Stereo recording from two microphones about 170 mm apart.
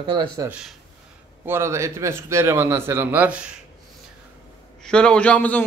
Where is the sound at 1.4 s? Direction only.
15° right (ahead or behind).